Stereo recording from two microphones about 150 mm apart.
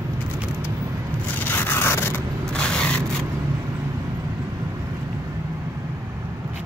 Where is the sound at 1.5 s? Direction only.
15° left (ahead or behind).